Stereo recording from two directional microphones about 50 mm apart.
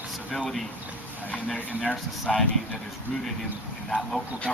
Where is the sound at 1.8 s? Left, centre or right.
Centre.